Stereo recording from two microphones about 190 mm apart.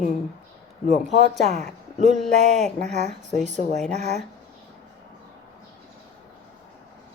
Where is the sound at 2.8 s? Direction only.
35° right (ahead or behind).